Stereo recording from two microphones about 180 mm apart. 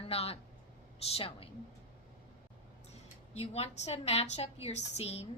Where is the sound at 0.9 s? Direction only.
35° left (ahead or behind).